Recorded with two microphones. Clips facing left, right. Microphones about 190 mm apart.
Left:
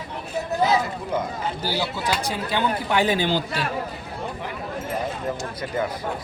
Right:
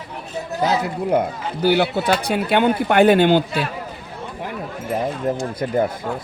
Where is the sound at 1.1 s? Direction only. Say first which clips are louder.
Right 5 dB; 60° right (ahead or behind).